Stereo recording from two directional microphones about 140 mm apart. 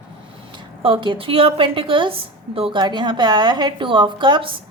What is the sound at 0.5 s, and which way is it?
A woman's voice, 40° right (ahead or behind).